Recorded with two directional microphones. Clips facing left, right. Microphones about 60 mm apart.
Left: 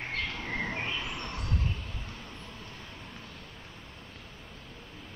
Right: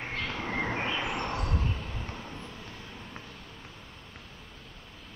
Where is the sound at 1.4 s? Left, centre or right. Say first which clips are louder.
Right 2 dB; centre.